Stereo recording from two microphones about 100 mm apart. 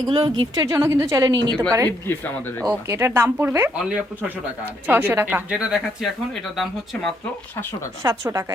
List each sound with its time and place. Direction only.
0.1 s a woman's voice: 55° right (ahead or behind)
0.5 s a woman's voice: 35° right (ahead or behind)
2.1 s speech: 25° left (ahead or behind)
2.8 s speech: 25° right (ahead or behind)
3.8 s speech: 10° right (ahead or behind)
8.0 s a woman's voice: 30° right (ahead or behind)